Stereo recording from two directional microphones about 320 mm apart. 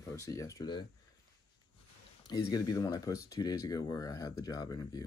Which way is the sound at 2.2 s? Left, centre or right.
Centre.